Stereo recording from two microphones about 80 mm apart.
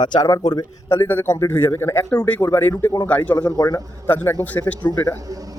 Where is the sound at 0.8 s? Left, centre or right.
Left.